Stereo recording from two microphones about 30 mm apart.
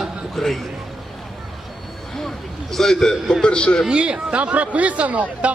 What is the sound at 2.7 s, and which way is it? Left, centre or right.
Speech, centre.